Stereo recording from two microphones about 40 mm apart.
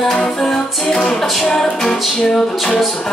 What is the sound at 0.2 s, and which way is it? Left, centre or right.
Music, centre.